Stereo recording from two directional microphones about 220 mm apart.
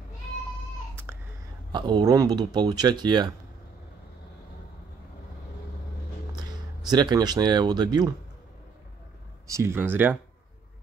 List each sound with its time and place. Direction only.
1.1 s hiccup: 10° right (ahead or behind)
1.7 s speech: 20° right (ahead or behind)
6.3 s speech: 20° right (ahead or behind)
9.5 s speech: 10° right (ahead or behind)